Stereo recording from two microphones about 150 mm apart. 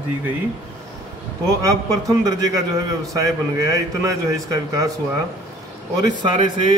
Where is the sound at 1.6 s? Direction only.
20° right (ahead or behind).